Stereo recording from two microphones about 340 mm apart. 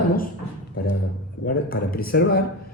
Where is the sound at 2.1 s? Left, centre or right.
Left.